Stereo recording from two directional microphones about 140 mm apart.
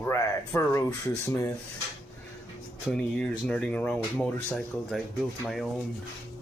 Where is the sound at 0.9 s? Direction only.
15° left (ahead or behind).